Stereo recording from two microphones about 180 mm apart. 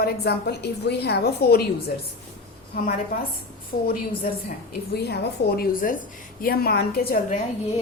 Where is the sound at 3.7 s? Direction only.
55° left (ahead or behind).